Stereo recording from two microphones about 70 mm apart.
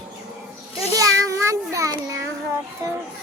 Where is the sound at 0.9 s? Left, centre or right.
Right.